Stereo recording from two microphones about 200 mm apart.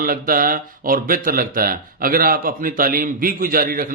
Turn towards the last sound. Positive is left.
turn(degrees=-45)  # may be behind; listen again after turning